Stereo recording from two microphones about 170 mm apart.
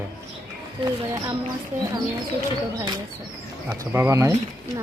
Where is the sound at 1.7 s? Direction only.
10° right (ahead or behind).